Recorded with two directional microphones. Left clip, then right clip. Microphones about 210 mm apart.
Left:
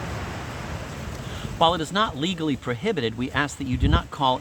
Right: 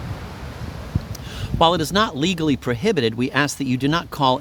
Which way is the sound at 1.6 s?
50° right (ahead or behind).